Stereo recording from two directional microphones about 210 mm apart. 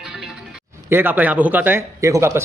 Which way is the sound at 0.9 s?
10° right (ahead or behind).